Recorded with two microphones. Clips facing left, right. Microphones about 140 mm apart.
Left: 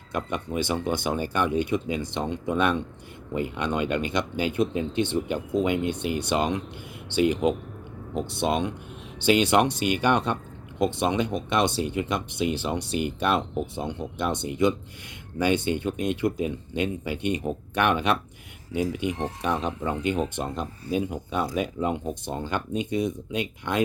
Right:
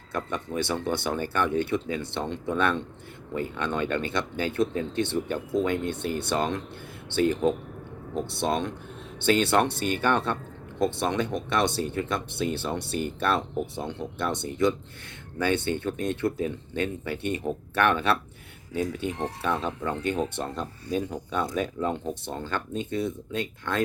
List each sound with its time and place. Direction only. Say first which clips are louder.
0.1 s speech: left 2 dB; 20° left (ahead or behind)